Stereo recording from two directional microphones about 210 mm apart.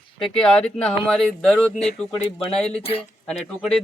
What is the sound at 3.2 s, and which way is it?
Speech, 5° left (ahead or behind).